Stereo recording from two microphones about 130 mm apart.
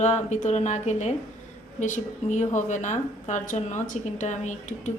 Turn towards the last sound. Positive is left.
turn(degrees=65)  # may be behind; listen again after turning